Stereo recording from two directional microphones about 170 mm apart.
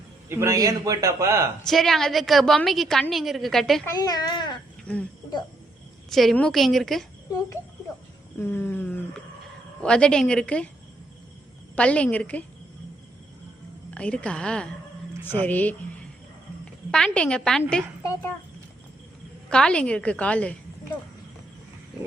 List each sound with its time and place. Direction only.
0.3 s a man's voice: 15° right (ahead or behind)
1.6 s a woman's voice: centre (ahead or behind)
3.8 s a woman's voice: 20° left (ahead or behind)
6.1 s a woman's voice: centre (ahead or behind)
8.4 s a woman's voice: 10° left (ahead or behind)
11.8 s a woman's voice: 5° left (ahead or behind)
13.9 s a woman's voice: 5° left (ahead or behind)
19.5 s a woman's voice: 5° left (ahead or behind)
21.9 s wild animals: 5° right (ahead or behind)